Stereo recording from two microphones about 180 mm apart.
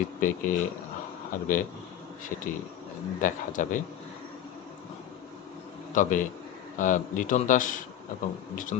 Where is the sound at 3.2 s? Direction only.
45° left (ahead or behind).